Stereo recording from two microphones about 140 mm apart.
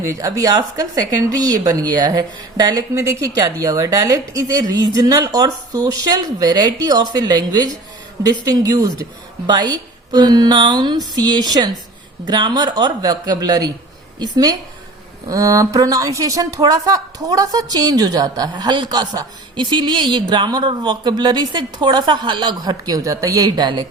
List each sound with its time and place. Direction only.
0.0 s a woman's voice: 25° right (ahead or behind)